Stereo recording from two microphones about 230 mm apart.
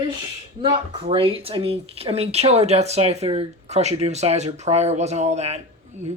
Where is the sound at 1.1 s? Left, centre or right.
Right.